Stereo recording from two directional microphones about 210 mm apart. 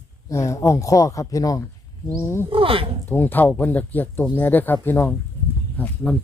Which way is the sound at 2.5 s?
25° right (ahead or behind).